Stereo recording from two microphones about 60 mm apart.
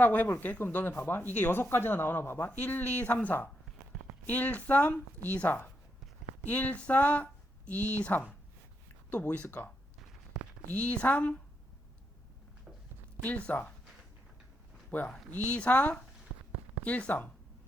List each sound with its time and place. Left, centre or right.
0.0 s a woman's voice: left
10.3 s a sound: centre
10.7 s a woman's voice: left
13.2 s a woman's voice: left
14.8 s a woman's voice: left
16.3 s a sound: centre
16.8 s a woman's voice: left